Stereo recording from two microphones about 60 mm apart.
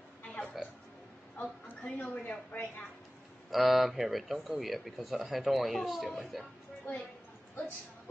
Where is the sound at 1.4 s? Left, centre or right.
Left.